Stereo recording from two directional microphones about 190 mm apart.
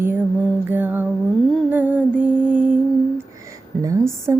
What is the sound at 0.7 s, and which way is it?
Music, 10° right (ahead or behind).